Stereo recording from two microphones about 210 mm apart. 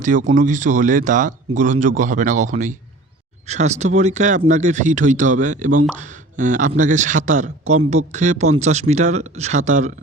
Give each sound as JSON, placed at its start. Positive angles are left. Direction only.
{"t": 0.0, "sound": "speech", "side_deg": -35}